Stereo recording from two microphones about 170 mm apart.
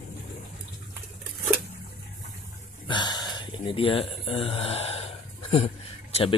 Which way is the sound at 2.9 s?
25° left (ahead or behind).